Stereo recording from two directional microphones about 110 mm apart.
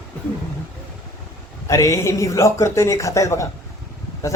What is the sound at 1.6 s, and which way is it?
Speech, 30° left (ahead or behind).